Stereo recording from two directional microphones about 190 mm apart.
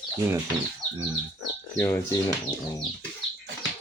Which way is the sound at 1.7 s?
15° left (ahead or behind).